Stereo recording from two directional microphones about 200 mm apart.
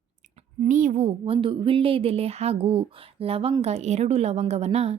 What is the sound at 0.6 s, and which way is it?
A woman's voice, 40° right (ahead or behind).